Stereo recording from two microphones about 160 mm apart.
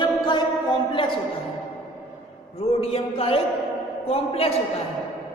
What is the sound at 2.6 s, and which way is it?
A woman's voice, 40° left (ahead or behind).